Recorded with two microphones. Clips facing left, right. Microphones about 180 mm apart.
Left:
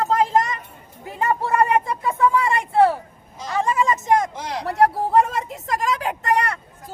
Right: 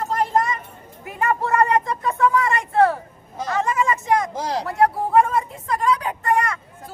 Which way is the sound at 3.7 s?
35° left (ahead or behind).